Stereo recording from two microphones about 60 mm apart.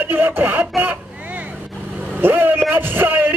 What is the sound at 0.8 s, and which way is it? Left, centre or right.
Vehicle, right.